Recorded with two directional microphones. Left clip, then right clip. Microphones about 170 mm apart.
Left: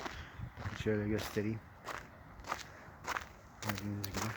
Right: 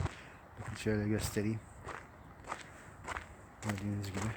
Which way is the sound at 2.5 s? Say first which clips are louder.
Left 2 dB; 70° left (ahead or behind).